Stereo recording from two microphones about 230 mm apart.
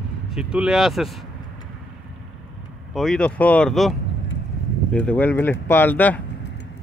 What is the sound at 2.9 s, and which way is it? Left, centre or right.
Speech, centre.